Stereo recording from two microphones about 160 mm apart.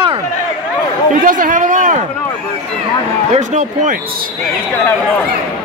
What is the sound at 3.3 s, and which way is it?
Speech, 50° right (ahead or behind).